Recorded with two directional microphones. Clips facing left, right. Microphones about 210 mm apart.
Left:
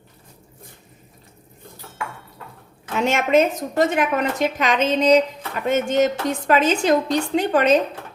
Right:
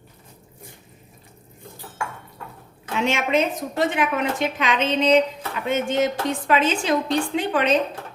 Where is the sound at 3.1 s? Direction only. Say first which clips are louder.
Left 5 dB; 45° left (ahead or behind).